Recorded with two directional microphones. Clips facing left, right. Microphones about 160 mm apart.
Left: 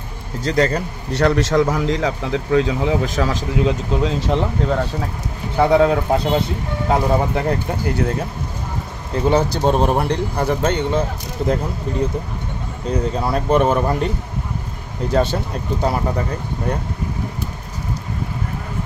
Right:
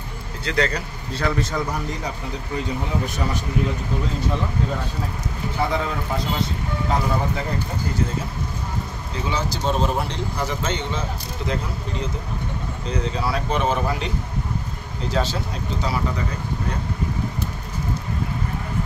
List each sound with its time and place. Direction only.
0.4 s a man's voice: 40° left (ahead or behind)
1.1 s speech: 70° left (ahead or behind)
5.6 s speech: 70° left (ahead or behind)
9.1 s speech: 55° left (ahead or behind)
12.9 s speech: 50° left (ahead or behind)
15.8 s speech: 50° left (ahead or behind)